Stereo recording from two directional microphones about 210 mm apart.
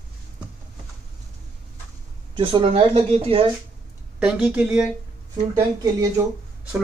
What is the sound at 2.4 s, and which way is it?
Speech, 25° right (ahead or behind).